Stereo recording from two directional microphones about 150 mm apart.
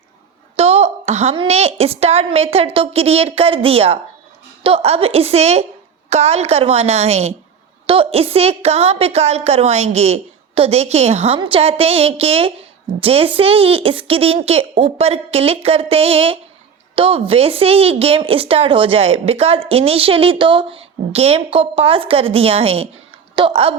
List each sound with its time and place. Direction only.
0.5 s a woman's voice: 45° right (ahead or behind)